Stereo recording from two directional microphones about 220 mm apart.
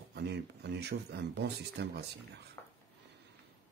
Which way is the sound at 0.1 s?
50° right (ahead or behind).